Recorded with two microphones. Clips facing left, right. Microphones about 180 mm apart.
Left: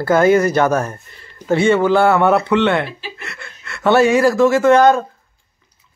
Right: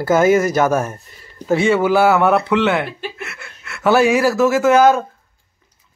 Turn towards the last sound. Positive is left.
turn(degrees=-5)  # may be behind; listen again after turning